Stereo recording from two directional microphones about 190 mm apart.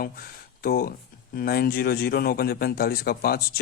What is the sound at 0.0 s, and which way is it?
Speech, 50° left (ahead or behind).